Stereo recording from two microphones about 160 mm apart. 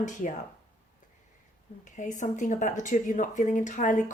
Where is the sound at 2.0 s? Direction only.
50° left (ahead or behind).